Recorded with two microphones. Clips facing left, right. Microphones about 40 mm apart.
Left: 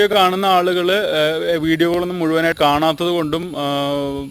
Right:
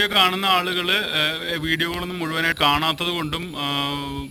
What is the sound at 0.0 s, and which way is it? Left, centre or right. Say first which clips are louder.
A man's voice: left 5 dB; centre.